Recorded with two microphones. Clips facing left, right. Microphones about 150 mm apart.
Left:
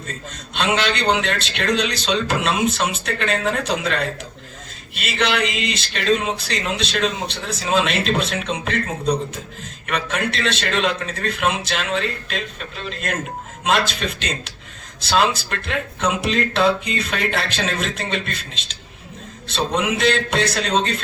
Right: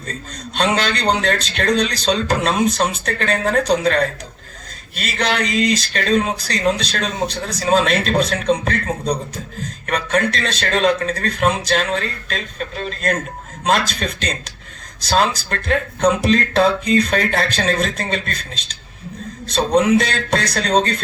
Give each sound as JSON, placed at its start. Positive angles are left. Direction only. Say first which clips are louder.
{"t": 0.5, "sound": "speech", "louder": "right 2 dB", "side_deg": -40}